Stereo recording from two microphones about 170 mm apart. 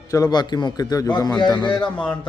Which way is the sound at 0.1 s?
20° left (ahead or behind).